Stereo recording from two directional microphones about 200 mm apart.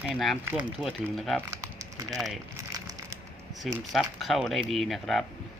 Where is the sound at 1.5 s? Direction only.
15° right (ahead or behind).